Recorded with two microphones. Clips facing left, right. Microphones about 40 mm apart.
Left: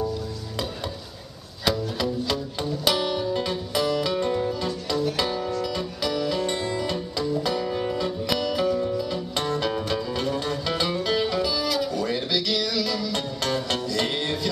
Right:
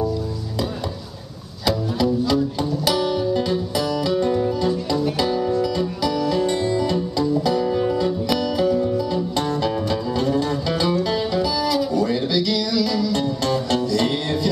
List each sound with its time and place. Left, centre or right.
1.7 s music: centre
3.1 s music: centre
4.6 s music: centre
5.2 s music: centre